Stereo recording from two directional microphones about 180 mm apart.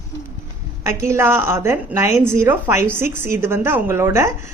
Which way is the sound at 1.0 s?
15° right (ahead or behind).